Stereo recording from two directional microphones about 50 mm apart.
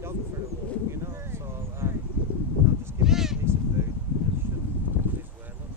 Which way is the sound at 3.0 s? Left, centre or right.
Centre.